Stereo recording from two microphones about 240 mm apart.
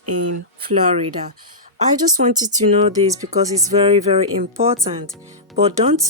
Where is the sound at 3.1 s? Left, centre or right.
Centre.